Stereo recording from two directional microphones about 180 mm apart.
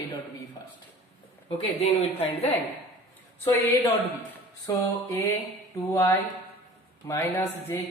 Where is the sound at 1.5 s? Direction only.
35° left (ahead or behind).